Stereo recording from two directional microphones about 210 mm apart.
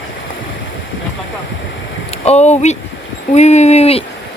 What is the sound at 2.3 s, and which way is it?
Speech, 30° left (ahead or behind).